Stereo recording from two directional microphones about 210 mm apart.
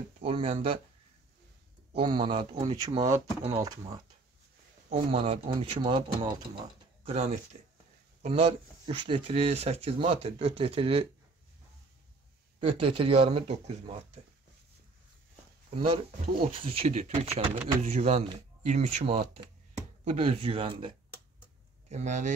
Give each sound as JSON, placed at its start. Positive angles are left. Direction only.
{"t": 0.2, "sound": "speech", "side_deg": -25}
{"t": 1.9, "sound": "speech", "side_deg": -25}
{"t": 4.8, "sound": "speech", "side_deg": -30}
{"t": 7.1, "sound": "speech", "side_deg": -35}
{"t": 12.5, "sound": "speech", "side_deg": -25}
{"t": 16.4, "sound": "speech", "side_deg": -25}